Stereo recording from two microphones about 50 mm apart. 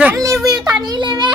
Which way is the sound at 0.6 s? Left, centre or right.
Centre.